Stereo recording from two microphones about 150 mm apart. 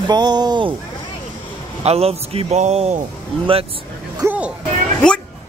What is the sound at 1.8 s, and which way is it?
A man's voice, 45° right (ahead or behind).